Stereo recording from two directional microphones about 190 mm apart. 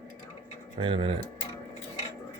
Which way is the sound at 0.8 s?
25° right (ahead or behind).